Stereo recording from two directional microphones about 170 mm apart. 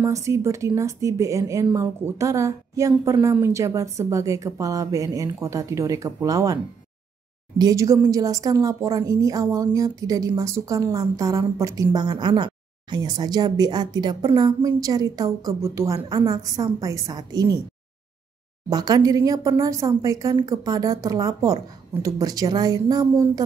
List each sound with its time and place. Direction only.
0.0 s a woman's voice: 15° right (ahead or behind)
18.7 s a woman's voice: 20° right (ahead or behind)